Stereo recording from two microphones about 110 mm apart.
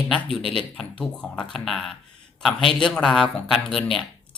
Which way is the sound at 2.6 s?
50° left (ahead or behind).